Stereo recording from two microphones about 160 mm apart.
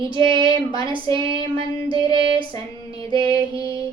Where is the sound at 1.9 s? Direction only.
30° right (ahead or behind).